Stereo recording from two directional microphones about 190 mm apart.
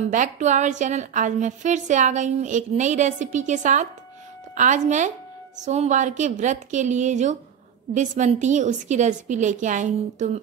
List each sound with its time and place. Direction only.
0.1 s a woman's voice: 40° right (ahead or behind)